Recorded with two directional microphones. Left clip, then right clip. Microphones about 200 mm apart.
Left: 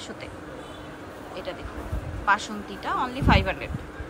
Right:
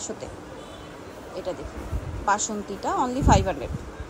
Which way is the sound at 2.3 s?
25° right (ahead or behind).